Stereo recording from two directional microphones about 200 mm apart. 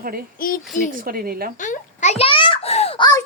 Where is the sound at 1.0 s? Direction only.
50° right (ahead or behind).